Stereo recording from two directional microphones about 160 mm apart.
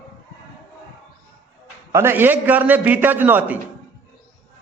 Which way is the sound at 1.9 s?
15° right (ahead or behind).